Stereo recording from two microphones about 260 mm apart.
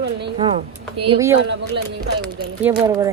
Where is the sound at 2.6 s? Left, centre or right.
Centre.